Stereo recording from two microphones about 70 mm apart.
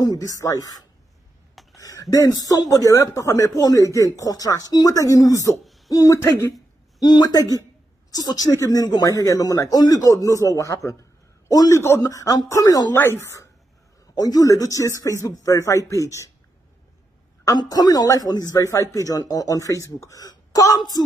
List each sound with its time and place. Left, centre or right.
0.0 s speech: left
1.5 s a sound: centre
1.8 s speech: left
7.0 s speech: left
8.1 s speech: left
8.5 s a man's voice: left
12.9 s speech: left
14.1 s speech: left
17.6 s speech: left
18.5 s speech: left
20.2 s a sound: left